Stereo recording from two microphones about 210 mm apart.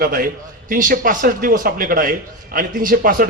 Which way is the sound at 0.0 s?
40° right (ahead or behind).